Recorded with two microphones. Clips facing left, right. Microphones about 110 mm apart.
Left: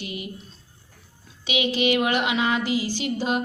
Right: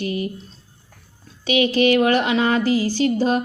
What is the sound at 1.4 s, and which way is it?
Speech, 40° right (ahead or behind).